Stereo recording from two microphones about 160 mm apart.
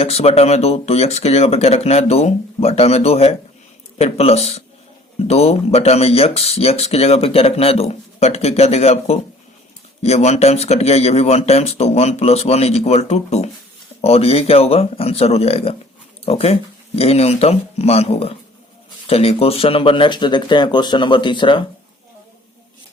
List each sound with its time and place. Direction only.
0.0 s speech: 40° left (ahead or behind)